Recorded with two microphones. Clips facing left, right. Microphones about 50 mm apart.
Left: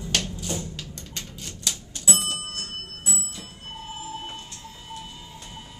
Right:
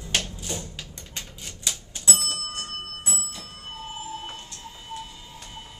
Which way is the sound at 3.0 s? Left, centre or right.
Right.